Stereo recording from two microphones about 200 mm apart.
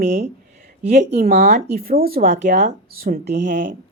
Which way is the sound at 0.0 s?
35° right (ahead or behind).